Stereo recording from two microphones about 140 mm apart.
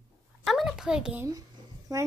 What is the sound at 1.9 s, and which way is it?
Speech, 25° right (ahead or behind).